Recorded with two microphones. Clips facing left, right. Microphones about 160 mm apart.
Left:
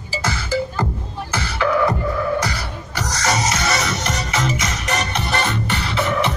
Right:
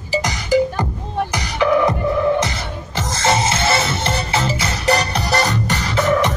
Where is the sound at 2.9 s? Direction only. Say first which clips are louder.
Right 3 dB; 25° right (ahead or behind).